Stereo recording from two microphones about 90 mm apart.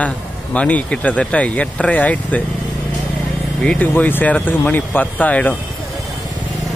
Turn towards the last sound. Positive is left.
turn(degrees=15)  # may be behind; listen again after turning